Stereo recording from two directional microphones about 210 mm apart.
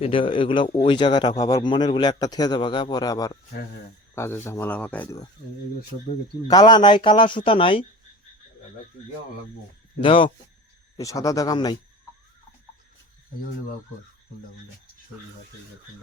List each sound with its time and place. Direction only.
0.0 s speech: 25° left (ahead or behind); by 5.2 s 5° left (ahead or behind)
6.5 s speech: 20° left (ahead or behind)
10.0 s speech: 25° left (ahead or behind)